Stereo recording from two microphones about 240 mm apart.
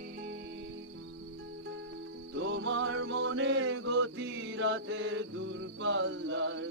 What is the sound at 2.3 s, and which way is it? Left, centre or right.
Music, right.